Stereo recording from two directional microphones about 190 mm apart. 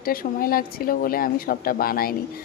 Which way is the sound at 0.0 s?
50° left (ahead or behind).